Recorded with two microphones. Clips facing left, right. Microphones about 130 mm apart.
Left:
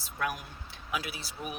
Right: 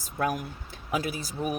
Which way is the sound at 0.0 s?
45° right (ahead or behind).